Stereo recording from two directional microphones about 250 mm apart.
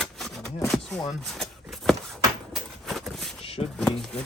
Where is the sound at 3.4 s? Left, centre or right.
Left.